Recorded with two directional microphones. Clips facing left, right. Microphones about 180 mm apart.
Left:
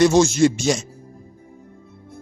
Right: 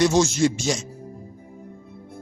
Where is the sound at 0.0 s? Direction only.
55° left (ahead or behind).